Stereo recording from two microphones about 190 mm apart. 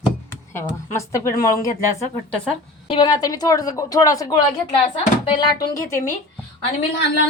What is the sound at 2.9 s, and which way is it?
A woman's voice, 20° left (ahead or behind).